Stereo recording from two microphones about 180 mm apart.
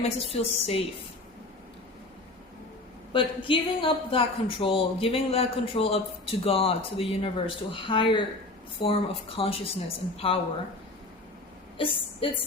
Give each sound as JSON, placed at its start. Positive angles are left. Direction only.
{"t": 0.0, "sound": "speech", "side_deg": 35}
{"t": 3.1, "sound": "speech", "side_deg": 30}
{"t": 11.8, "sound": "a woman's voice", "side_deg": 30}